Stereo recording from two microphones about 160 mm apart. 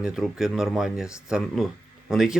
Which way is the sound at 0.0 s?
5° right (ahead or behind).